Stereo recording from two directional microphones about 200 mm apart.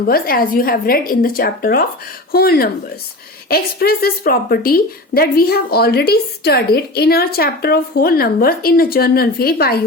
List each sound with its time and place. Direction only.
0.0 s a woman's voice: 45° left (ahead or behind)